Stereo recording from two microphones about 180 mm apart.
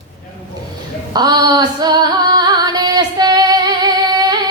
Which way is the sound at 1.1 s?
25° right (ahead or behind).